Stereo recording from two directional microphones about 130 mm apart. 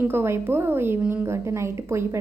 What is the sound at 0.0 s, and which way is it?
A woman's voice, 15° right (ahead or behind).